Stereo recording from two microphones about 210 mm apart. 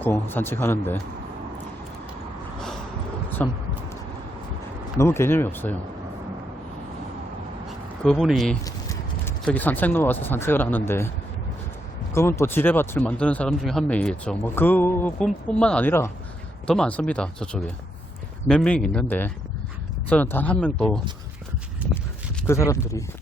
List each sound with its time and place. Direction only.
0.0 s speech: 10° left (ahead or behind)
3.2 s a sound: 10° left (ahead or behind)
4.9 s speech: 10° left (ahead or behind)
8.0 s speech: 5° left (ahead or behind)
8.6 s a sound: 15° left (ahead or behind)
9.4 s speech: 5° left (ahead or behind)
12.1 s speech: 10° left (ahead or behind)
22.4 s speech: 15° left (ahead or behind)